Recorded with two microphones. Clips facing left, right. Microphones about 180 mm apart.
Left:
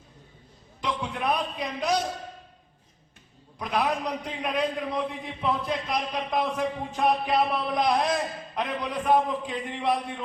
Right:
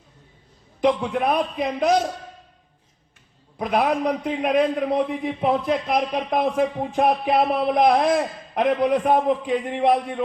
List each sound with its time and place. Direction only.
0.8 s a man's voice: 50° right (ahead or behind)
3.6 s a man's voice: 55° right (ahead or behind)